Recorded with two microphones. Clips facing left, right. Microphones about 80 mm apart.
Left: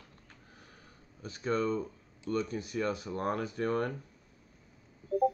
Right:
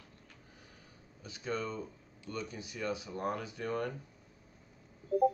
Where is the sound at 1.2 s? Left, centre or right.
Left.